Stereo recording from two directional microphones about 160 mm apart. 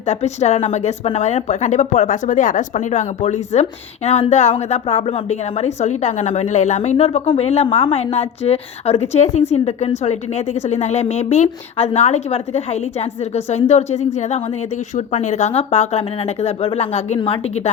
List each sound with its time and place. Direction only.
0.0 s a woman's voice: 45° left (ahead or behind)